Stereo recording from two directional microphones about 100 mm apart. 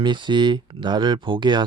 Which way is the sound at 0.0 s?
50° right (ahead or behind).